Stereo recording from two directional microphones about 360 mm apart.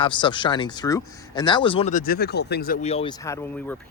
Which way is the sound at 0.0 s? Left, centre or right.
Centre.